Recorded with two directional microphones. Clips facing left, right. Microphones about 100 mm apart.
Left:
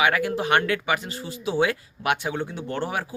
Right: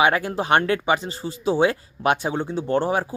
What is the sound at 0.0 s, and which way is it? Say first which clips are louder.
Speech: right 2 dB; 30° right (ahead or behind).